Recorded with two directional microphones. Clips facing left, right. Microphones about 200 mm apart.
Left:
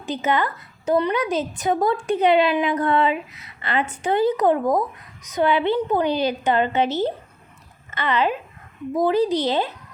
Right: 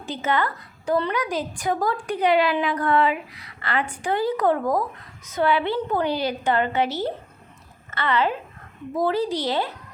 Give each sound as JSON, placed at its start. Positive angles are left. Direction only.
{"t": 0.0, "sound": "a woman's voice", "side_deg": 20}